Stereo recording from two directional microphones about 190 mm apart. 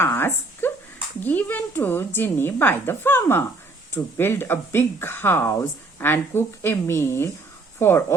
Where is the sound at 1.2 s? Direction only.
10° left (ahead or behind).